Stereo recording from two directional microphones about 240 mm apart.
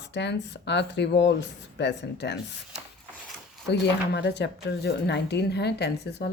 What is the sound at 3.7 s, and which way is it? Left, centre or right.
Speech, left.